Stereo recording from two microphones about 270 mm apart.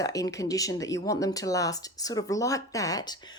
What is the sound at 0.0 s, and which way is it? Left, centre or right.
Speech, centre.